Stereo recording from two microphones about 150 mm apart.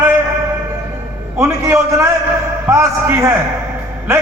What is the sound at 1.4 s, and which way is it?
A man's voice, 20° right (ahead or behind).